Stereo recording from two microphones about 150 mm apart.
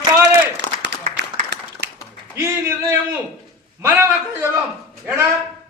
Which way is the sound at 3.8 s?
15° right (ahead or behind).